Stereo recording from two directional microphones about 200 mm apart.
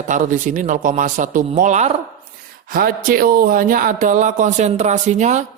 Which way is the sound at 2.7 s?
45° right (ahead or behind).